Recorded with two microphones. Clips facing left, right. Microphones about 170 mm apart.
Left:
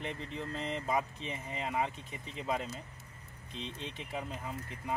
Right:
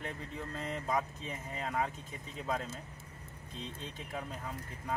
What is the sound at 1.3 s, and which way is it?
Speech, 15° left (ahead or behind).